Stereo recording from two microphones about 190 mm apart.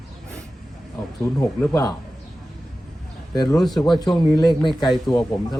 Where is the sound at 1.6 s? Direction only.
20° left (ahead or behind).